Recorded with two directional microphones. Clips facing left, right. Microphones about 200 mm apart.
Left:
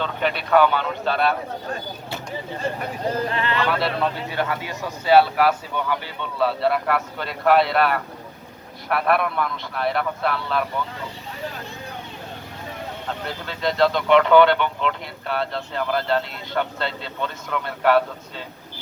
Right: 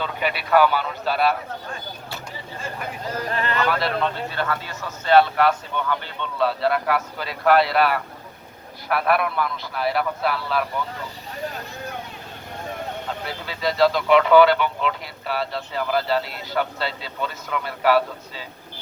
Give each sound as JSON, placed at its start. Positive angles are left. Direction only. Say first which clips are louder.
{"t": 0.0, "sound": "speech", "louder": "left 2 dB", "side_deg": -10}
{"t": 3.3, "sound": "speech", "louder": "left 1 dB", "side_deg": -40}
{"t": 3.7, "sound": "speech", "louder": "left 1 dB", "side_deg": 0}
{"t": 4.1, "sound": "speech", "louder": "left 1 dB", "side_deg": 15}
{"t": 13.2, "sound": "speech", "louder": "left 1 dB", "side_deg": -5}